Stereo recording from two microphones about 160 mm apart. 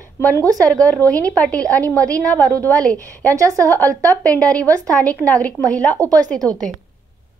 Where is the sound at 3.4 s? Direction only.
20° right (ahead or behind).